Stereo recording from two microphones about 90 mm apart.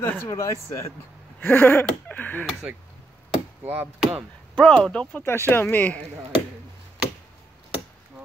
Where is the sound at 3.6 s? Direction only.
20° right (ahead or behind).